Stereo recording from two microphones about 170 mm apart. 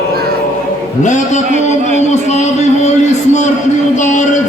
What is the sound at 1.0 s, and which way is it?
Music, 45° left (ahead or behind).